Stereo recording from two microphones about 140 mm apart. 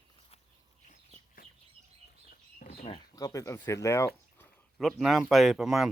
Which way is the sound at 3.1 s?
25° left (ahead or behind).